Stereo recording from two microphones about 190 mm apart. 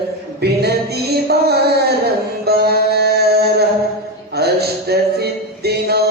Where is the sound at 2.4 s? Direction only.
55° right (ahead or behind).